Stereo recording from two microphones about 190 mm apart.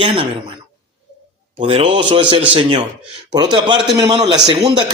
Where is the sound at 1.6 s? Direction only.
30° right (ahead or behind).